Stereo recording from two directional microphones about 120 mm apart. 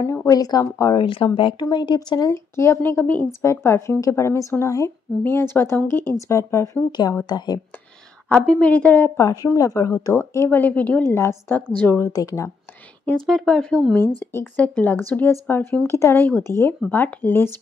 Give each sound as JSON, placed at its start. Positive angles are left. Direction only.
{"t": 0.3, "sound": "speech", "side_deg": 30}
{"t": 1.0, "sound": "speech", "side_deg": 45}
{"t": 2.3, "sound": "a woman's voice", "side_deg": 20}
{"t": 8.3, "sound": "speech", "side_deg": 10}
{"t": 9.2, "sound": "a woman's voice", "side_deg": 35}
{"t": 12.1, "sound": "speech", "side_deg": 30}
{"t": 13.0, "sound": "speech", "side_deg": 5}
{"t": 14.2, "sound": "speech", "side_deg": 15}